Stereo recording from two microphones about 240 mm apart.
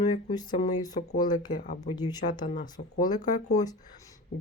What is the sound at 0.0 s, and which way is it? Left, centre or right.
Speech, centre.